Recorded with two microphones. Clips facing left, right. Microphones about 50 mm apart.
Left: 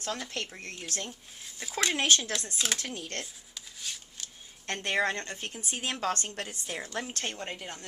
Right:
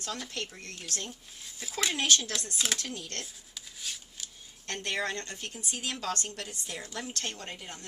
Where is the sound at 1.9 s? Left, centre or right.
Left.